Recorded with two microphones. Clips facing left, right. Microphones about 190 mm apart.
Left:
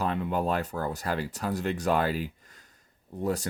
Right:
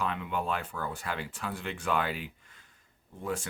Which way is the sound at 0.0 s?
40° left (ahead or behind).